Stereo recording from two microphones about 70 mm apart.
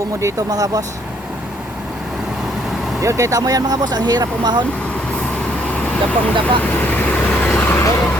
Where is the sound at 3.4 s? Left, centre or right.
Right.